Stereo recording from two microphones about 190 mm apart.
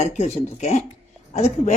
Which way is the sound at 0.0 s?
35° left (ahead or behind).